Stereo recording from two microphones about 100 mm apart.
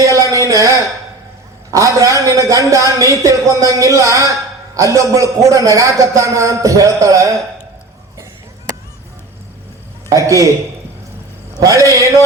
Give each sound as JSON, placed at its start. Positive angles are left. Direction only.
{"t": 0.0, "sound": "a sound", "side_deg": -35}
{"t": 1.7, "sound": "a man's voice", "side_deg": -35}
{"t": 10.1, "sound": "a man's voice", "side_deg": -35}
{"t": 11.6, "sound": "a man's voice", "side_deg": -35}